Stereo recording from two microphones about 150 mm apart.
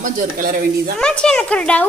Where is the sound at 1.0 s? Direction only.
5° left (ahead or behind).